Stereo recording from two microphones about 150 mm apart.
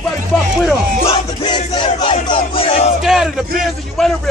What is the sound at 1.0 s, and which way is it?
Music, 30° left (ahead or behind).